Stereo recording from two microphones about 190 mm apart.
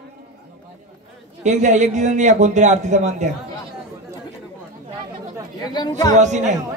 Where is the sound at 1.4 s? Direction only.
40° right (ahead or behind).